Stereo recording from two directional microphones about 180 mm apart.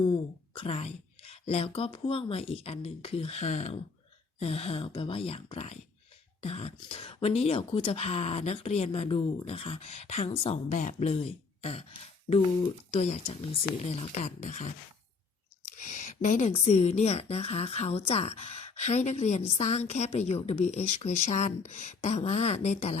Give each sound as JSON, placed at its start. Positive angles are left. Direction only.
{"t": 0.1, "sound": "speech", "side_deg": 30}
{"t": 12.9, "sound": "speech", "side_deg": 35}